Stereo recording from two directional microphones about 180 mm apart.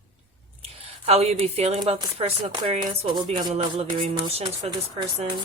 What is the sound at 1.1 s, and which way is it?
Speech, 35° right (ahead or behind).